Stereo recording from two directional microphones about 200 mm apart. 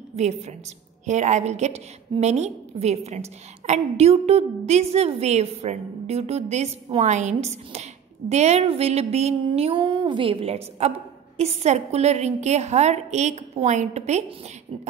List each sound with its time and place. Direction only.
0.1 s a woman's voice: 35° right (ahead or behind)